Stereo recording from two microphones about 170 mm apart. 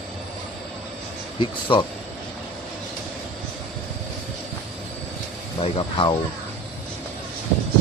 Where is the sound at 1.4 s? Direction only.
30° left (ahead or behind).